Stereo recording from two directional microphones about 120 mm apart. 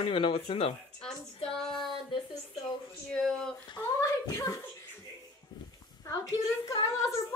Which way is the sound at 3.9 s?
30° left (ahead or behind).